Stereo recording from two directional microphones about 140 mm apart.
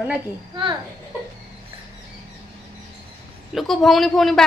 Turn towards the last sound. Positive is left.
turn(degrees=0)  # may be behind; listen again after turning